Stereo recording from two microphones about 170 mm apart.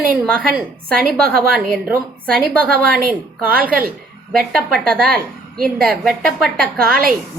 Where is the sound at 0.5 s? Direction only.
60° right (ahead or behind).